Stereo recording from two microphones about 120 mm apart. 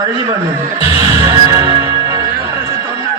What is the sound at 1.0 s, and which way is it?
Music, 30° right (ahead or behind).